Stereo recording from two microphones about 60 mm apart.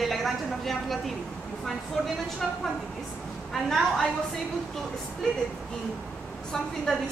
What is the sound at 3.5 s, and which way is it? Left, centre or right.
Speech, centre.